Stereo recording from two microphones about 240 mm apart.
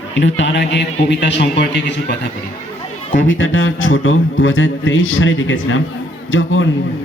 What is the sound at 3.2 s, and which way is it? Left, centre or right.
A man's voice, left.